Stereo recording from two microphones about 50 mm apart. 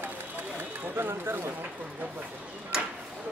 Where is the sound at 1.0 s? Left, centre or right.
Right.